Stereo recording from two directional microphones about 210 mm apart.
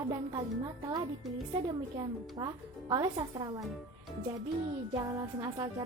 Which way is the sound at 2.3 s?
20° right (ahead or behind).